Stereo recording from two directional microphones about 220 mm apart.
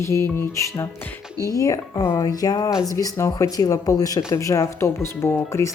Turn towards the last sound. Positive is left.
turn(degrees=10)  # may be behind; listen again after turning